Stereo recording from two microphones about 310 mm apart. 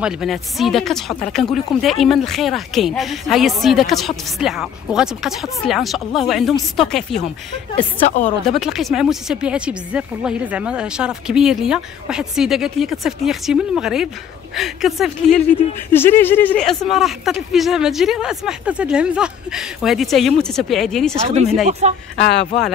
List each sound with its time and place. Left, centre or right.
0.0 s speech: centre
7.7 s a woman's voice: left
8.5 s speech: centre
21.3 s speech: right